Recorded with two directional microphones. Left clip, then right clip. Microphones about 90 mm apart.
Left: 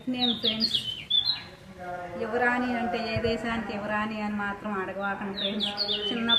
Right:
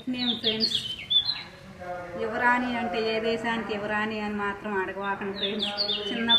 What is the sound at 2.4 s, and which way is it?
A woman's voice, 35° left (ahead or behind).